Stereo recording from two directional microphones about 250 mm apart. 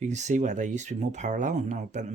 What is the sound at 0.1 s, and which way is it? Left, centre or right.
Speech, right.